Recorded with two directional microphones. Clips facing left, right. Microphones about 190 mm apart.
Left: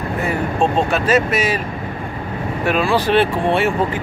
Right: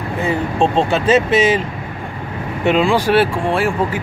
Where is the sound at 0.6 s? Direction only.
30° right (ahead or behind).